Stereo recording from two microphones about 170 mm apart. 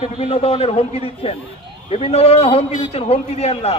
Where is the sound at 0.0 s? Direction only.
35° left (ahead or behind).